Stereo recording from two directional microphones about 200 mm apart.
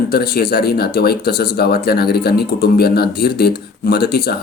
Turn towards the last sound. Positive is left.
turn(degrees=50)  # may be behind; listen again after turning